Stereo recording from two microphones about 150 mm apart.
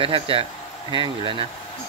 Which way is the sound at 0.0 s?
40° right (ahead or behind).